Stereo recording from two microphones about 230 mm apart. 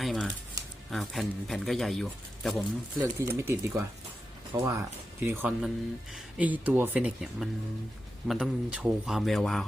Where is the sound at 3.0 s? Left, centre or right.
Centre.